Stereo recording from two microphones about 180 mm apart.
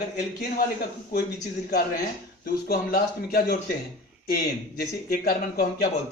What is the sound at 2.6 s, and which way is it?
Speech, 60° left (ahead or behind).